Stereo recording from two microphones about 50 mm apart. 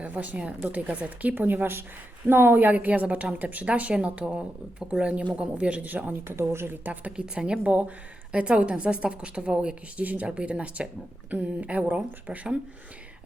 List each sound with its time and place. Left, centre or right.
0.0 s speech: right
2.3 s speech: right
2.6 s a woman's voice: right
6.2 s speech: right
6.8 s speech: right
7.2 s a woman's voice: right
10.0 s speech: right
10.2 s a woman's voice: right